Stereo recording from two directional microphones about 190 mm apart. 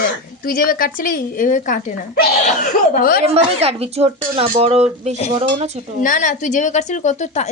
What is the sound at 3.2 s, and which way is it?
Speech, 35° right (ahead or behind).